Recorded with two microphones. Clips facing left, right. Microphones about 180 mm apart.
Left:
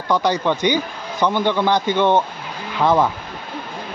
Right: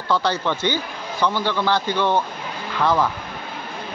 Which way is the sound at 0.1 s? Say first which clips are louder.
Left 3 dB; 15° left (ahead or behind).